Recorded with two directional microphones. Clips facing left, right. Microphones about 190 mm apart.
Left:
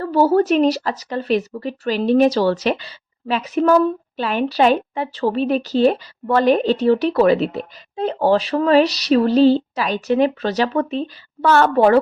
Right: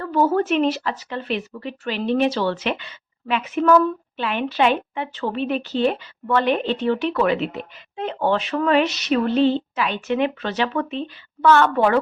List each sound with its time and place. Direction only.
0.0 s a woman's voice: 35° left (ahead or behind)